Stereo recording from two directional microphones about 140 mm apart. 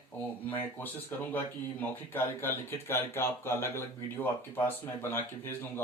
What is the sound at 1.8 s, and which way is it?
Speech, 15° left (ahead or behind).